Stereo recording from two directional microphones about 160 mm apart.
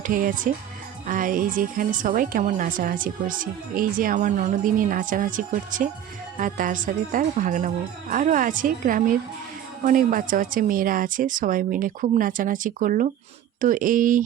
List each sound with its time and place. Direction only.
0.0 s speech: 60° right (ahead or behind)